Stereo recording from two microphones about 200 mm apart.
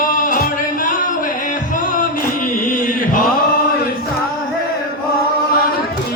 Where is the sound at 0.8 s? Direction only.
40° left (ahead or behind).